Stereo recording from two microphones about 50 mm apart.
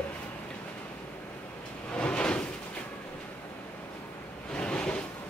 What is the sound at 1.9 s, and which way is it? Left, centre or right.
Drawer open or close, left.